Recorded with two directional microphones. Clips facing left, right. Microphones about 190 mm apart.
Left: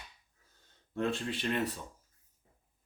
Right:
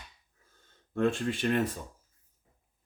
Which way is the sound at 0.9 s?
50° right (ahead or behind).